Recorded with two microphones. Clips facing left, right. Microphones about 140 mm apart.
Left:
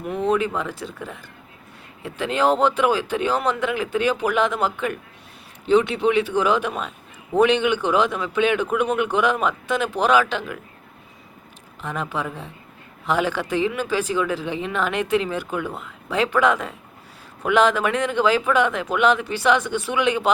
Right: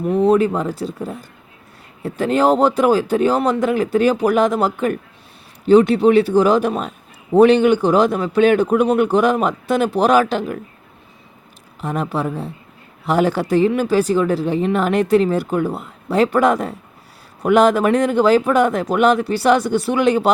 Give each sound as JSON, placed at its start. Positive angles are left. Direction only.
{"t": 0.1, "sound": "speech", "side_deg": -35}
{"t": 11.8, "sound": "speech", "side_deg": -40}